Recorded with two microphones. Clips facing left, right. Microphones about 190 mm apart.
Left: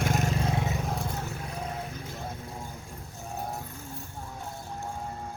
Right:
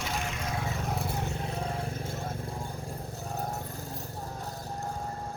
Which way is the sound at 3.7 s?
35° right (ahead or behind).